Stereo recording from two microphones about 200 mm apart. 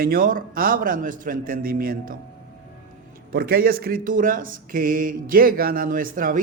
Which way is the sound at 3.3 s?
50° right (ahead or behind).